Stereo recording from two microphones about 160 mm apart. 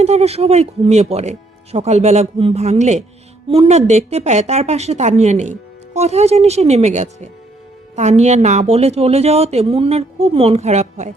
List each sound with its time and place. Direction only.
0.0 s a woman's voice: 40° right (ahead or behind)